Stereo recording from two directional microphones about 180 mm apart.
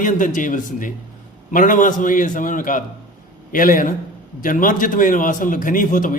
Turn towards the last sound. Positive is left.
turn(degrees=50)  # may be behind; listen again after turning